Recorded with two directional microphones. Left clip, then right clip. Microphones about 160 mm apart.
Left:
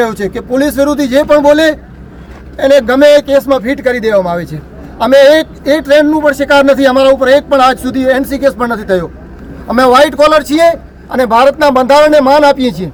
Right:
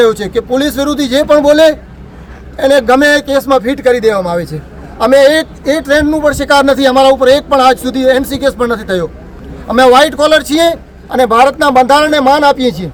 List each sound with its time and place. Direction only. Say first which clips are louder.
0.0 s a man's voice: right 4 dB; 25° right (ahead or behind)